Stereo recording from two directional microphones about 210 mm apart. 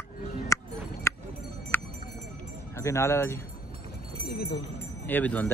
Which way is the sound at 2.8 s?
15° left (ahead or behind).